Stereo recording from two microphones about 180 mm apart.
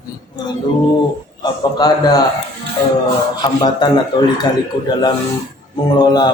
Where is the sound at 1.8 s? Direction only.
20° left (ahead or behind).